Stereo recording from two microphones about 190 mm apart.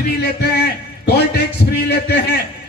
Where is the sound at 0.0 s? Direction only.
55° left (ahead or behind).